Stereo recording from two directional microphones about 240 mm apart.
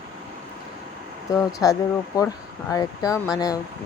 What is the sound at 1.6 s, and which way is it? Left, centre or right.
Speech, centre.